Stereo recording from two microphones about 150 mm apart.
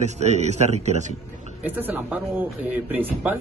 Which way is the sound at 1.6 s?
10° right (ahead or behind).